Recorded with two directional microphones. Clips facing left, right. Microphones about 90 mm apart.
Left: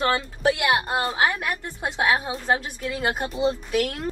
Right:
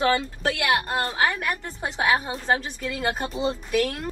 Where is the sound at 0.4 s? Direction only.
20° left (ahead or behind).